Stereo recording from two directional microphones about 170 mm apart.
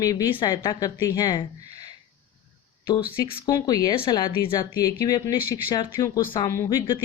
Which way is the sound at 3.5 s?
20° left (ahead or behind).